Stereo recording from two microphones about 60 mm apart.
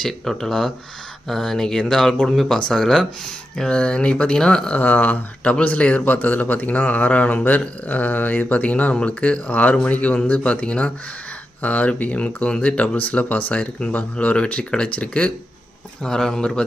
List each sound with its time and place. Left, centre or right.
0.0 s speech: centre
4.8 s speech: left